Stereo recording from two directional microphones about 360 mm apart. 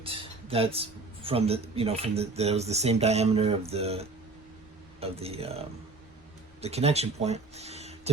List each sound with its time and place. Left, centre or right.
0.0 s speech: centre